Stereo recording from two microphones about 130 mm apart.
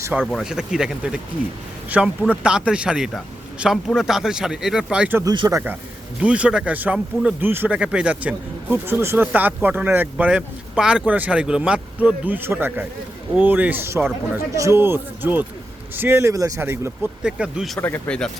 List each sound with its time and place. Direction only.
0.2 s speech: 5° left (ahead or behind)
5.2 s speech: 30° right (ahead or behind)
6.2 s speech: 10° right (ahead or behind)
17.7 s speech: 15° left (ahead or behind)